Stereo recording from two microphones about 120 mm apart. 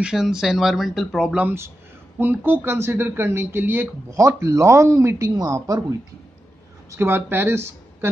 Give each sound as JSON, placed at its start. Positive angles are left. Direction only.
{"t": 0.0, "sound": "speech", "side_deg": -5}
{"t": 1.3, "sound": "speech", "side_deg": -15}